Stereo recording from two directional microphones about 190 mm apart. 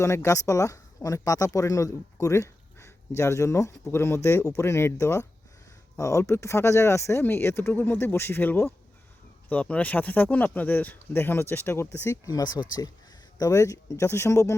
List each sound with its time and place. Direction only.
0.0 s speech: 15° left (ahead or behind)